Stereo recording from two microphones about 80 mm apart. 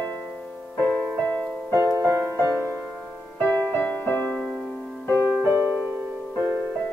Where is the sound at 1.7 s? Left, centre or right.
Right.